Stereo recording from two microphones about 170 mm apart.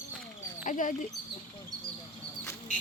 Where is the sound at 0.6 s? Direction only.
50° left (ahead or behind).